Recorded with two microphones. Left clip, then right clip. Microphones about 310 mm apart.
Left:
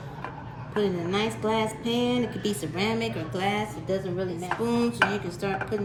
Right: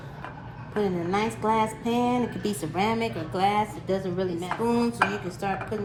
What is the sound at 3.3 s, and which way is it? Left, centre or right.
A woman's voice, centre.